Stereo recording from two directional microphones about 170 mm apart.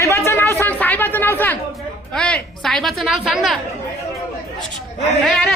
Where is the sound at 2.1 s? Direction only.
5° left (ahead or behind).